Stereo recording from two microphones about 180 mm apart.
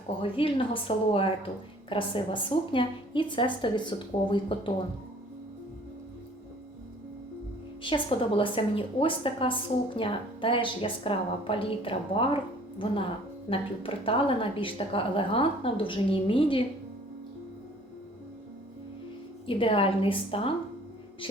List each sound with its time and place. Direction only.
0.2 s a woman's voice: 30° left (ahead or behind)
7.8 s a woman's voice: 25° left (ahead or behind)
13.5 s a woman's voice: 30° left (ahead or behind)
19.5 s a woman's voice: 30° left (ahead or behind)